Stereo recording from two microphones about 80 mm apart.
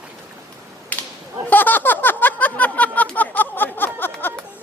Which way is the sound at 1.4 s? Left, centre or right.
Left.